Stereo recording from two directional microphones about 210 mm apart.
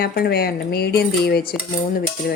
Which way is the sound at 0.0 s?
50° left (ahead or behind).